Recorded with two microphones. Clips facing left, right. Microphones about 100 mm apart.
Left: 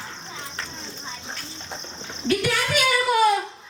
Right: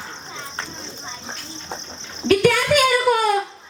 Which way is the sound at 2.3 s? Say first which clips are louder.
Right 7 dB; 50° right (ahead or behind).